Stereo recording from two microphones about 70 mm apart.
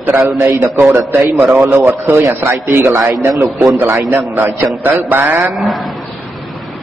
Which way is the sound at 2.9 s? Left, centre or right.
Right.